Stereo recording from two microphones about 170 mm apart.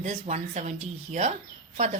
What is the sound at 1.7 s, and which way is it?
Speech, 45° right (ahead or behind).